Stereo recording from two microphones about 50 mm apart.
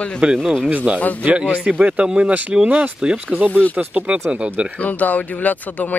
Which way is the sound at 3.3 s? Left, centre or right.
Right.